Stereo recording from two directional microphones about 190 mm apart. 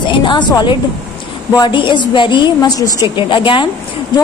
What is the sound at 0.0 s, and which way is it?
A woman's voice, 25° left (ahead or behind).